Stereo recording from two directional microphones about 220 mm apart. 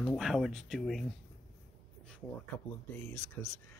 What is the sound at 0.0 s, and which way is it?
Speech, centre (ahead or behind).